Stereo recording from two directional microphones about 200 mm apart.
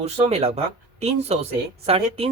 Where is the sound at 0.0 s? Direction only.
30° right (ahead or behind).